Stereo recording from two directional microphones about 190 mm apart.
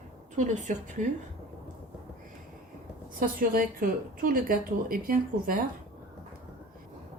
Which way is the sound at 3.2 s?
50° right (ahead or behind).